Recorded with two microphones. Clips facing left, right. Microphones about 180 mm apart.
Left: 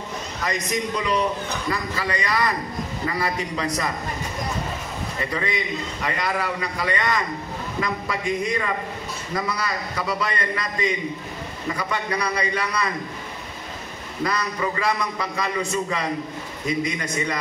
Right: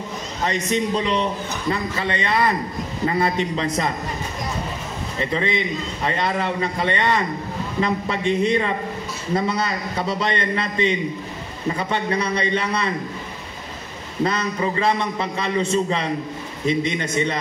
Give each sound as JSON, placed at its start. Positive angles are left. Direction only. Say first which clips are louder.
{"t": 0.4, "sound": "a man's voice", "louder": "right 4 dB", "side_deg": -30}
{"t": 5.2, "sound": "a man's voice", "louder": "right 5 dB", "side_deg": -25}
{"t": 14.2, "sound": "a man's voice", "louder": "right 3 dB", "side_deg": -25}